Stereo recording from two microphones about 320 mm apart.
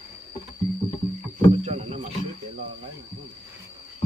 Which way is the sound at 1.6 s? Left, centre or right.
Centre.